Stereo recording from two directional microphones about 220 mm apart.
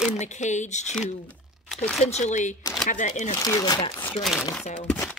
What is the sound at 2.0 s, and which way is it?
Speech, 30° left (ahead or behind).